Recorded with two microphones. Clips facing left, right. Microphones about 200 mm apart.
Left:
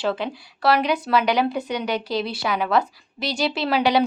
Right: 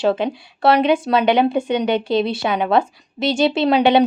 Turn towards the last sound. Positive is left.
turn(degrees=-20)  # may be behind; listen again after turning